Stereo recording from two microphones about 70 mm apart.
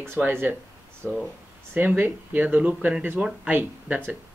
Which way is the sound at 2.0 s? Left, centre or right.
Right.